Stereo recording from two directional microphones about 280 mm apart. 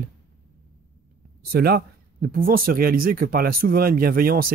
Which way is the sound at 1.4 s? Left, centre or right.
Right.